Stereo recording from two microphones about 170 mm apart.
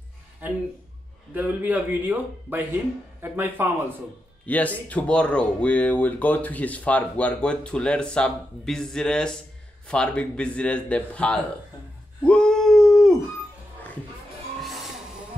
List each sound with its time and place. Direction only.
1.3 s a man's voice: 10° right (ahead or behind)
4.5 s speech: 10° left (ahead or behind)
12.2 s a sound: 5° left (ahead or behind)
14.6 s vehicle: centre (ahead or behind)